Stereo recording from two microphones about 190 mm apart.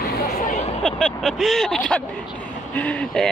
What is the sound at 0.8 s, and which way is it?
Speech, centre (ahead or behind).